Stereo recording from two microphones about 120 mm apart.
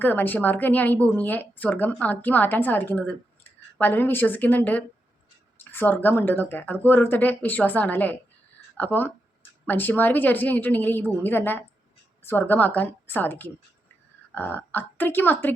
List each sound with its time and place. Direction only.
0.0 s a woman's voice: 15° left (ahead or behind)